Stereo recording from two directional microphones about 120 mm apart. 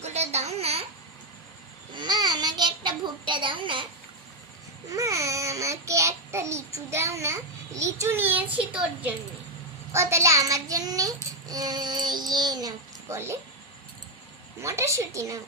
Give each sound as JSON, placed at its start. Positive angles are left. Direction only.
{"t": 0.0, "sound": "babbling", "side_deg": -65}
{"t": 1.9, "sound": "child singing", "side_deg": -40}
{"t": 4.9, "sound": "a child's voice", "side_deg": -25}
{"t": 9.9, "sound": "child singing", "side_deg": -25}
{"t": 13.1, "sound": "a woman's voice", "side_deg": -20}
{"t": 14.6, "sound": "a woman's voice", "side_deg": -25}